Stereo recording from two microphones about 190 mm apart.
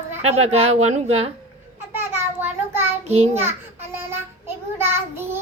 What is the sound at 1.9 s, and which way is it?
Speech, 10° right (ahead or behind).